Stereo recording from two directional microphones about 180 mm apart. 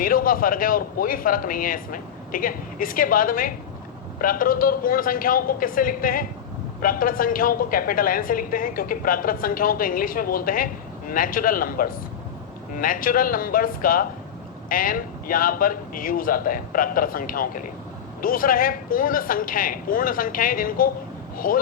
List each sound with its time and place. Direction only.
0.0 s a woman's voice: 50° left (ahead or behind)